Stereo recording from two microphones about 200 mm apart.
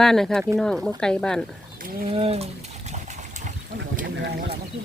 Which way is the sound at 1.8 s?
45° right (ahead or behind).